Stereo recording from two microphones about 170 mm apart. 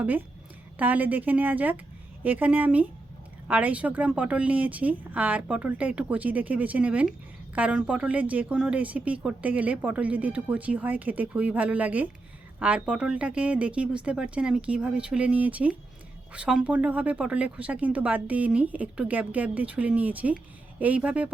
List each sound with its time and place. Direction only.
0.0 s a woman's voice: 10° right (ahead or behind)